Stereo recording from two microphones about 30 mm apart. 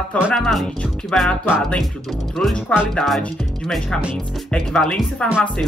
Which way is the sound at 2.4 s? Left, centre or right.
Left.